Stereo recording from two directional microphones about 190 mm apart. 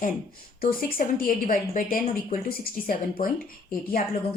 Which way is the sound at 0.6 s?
50° left (ahead or behind).